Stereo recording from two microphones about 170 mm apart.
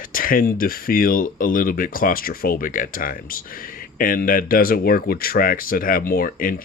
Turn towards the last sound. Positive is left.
turn(degrees=55)  # may be behind; listen again after turning